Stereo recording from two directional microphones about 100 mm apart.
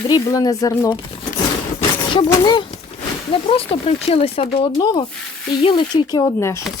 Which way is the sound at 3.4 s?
75° left (ahead or behind).